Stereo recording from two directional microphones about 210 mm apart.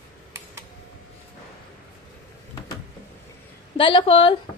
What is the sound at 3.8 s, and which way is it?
Speech, 25° left (ahead or behind).